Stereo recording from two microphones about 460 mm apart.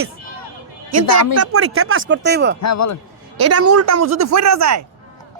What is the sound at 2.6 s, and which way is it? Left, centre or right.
Speech, left.